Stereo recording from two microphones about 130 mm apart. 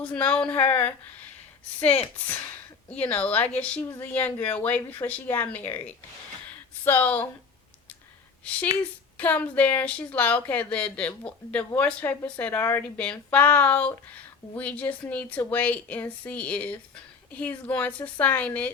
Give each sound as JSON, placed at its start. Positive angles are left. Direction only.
{"t": 0.0, "sound": "speech", "side_deg": 10}
{"t": 6.8, "sound": "speech", "side_deg": 15}
{"t": 8.4, "sound": "speech", "side_deg": 10}